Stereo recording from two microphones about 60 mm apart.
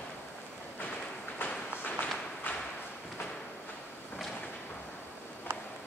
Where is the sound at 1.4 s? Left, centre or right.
Left.